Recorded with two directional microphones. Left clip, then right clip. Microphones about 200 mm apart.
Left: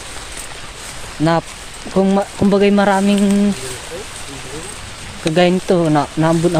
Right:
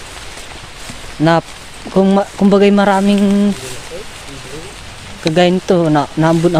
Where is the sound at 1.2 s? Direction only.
25° right (ahead or behind).